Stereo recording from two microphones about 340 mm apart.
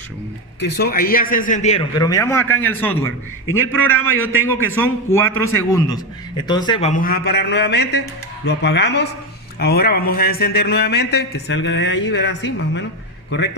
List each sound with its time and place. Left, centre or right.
0.6 s a man's voice: left